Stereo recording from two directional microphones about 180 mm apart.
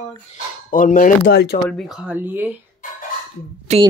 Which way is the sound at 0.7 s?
50° left (ahead or behind).